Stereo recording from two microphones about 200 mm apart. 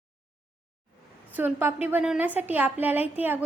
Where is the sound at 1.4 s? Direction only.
10° right (ahead or behind).